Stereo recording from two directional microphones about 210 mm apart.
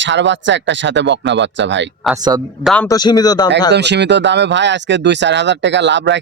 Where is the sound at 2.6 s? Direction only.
5° left (ahead or behind).